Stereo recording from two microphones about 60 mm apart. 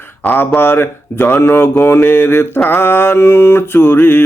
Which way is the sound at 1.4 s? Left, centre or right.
Left.